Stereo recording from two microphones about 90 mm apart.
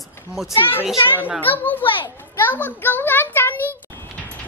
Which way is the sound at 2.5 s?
20° left (ahead or behind).